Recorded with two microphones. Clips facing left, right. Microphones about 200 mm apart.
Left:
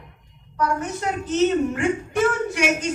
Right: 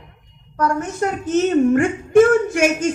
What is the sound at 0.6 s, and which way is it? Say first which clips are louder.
A man's voice: right 4 dB; 50° right (ahead or behind).